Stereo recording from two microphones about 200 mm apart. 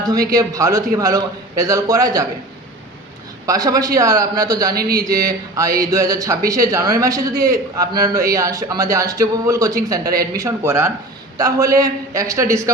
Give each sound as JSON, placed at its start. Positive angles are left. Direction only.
{"t": 0.0, "sound": "a man's voice", "side_deg": -20}
{"t": 3.4, "sound": "a man's voice", "side_deg": -20}
{"t": 4.7, "sound": "a man's voice", "side_deg": -50}
{"t": 4.9, "sound": "a man's voice", "side_deg": -20}